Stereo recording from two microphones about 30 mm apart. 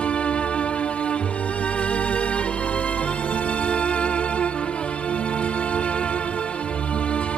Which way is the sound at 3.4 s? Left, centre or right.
Left.